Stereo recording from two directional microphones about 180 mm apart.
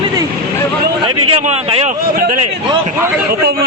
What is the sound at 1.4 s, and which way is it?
Speech, 35° right (ahead or behind).